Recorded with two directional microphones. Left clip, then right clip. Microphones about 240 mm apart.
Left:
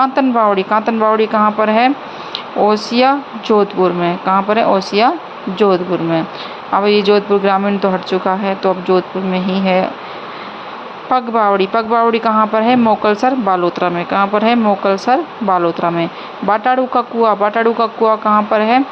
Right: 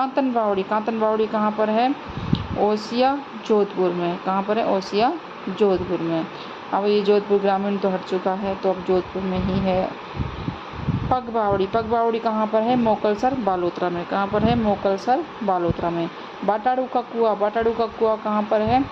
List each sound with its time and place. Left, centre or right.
0.0 s speech: centre
11.1 s speech: centre